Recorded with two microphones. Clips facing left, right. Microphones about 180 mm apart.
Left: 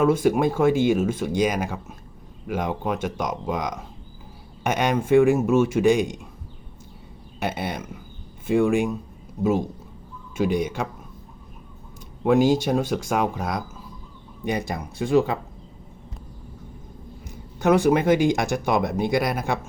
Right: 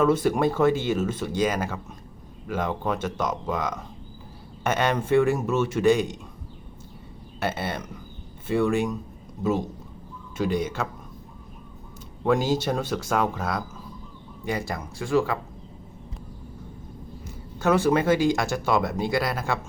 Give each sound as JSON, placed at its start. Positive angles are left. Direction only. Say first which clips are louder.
{"t": 0.0, "sound": "speech", "louder": "left 2 dB", "side_deg": 10}
{"t": 7.3, "sound": "speech", "louder": "left 1 dB", "side_deg": 15}
{"t": 12.2, "sound": "speech", "louder": "left 4 dB", "side_deg": 15}
{"t": 17.2, "sound": "speech", "louder": "left 3 dB", "side_deg": 15}